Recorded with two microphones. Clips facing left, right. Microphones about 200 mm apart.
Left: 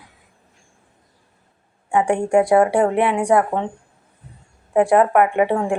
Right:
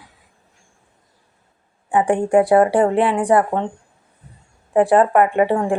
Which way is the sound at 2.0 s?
10° left (ahead or behind).